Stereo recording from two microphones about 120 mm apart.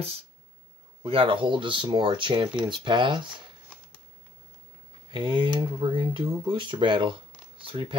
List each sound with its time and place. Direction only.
1.0 s speech: 50° right (ahead or behind)
5.1 s speech: 40° right (ahead or behind)